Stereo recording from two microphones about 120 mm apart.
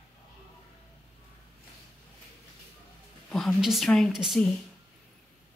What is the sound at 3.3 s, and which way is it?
A woman's voice, centre (ahead or behind).